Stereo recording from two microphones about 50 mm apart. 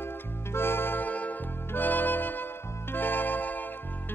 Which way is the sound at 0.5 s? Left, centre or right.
Left.